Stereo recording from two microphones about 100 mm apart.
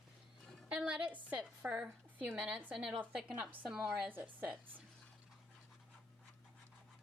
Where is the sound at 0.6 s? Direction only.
10° right (ahead or behind).